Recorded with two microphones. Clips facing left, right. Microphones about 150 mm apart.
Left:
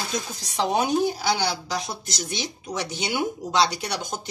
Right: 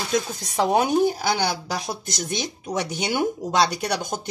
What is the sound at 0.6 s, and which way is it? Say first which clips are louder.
Speech: right 3 dB; 50° right (ahead or behind).